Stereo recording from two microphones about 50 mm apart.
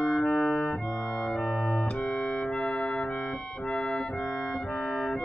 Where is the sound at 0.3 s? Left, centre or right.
Centre.